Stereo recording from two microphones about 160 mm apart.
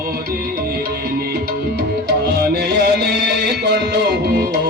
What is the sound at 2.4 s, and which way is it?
Music, 90° right.